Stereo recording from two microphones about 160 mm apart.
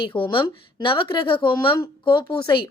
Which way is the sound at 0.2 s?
30° left (ahead or behind).